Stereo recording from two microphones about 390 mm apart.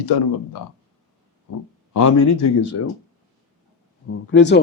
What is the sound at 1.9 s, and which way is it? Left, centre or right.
Speech, left.